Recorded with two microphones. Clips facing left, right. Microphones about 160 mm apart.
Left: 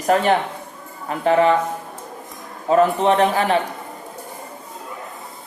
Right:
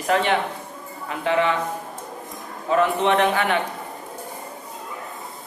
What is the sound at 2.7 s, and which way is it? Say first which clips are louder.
Speech: left 4 dB; 35° left (ahead or behind).